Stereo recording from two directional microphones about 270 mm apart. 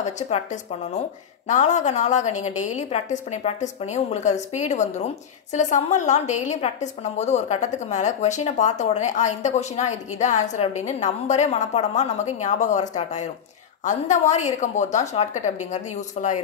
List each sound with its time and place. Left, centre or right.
0.0 s a woman's voice: left